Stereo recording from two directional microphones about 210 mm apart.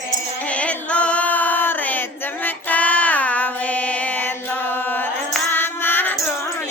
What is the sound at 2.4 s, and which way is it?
Child singing, 5° left (ahead or behind).